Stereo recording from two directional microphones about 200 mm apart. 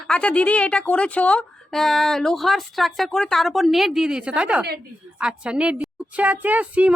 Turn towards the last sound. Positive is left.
turn(degrees=-5)  # may be behind; listen again after turning